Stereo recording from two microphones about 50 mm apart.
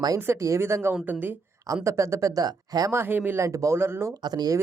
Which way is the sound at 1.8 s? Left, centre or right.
Right.